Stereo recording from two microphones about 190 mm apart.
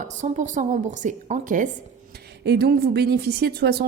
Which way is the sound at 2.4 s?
60° right (ahead or behind).